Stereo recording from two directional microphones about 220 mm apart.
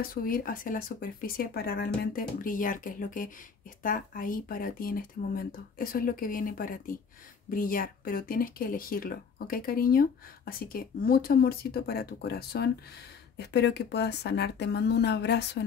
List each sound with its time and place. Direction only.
0.0 s speech: 40° left (ahead or behind)